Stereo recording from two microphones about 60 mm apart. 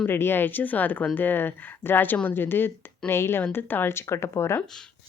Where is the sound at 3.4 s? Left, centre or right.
Left.